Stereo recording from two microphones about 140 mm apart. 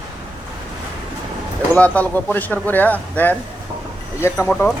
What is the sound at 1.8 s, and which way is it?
Speech, 10° left (ahead or behind).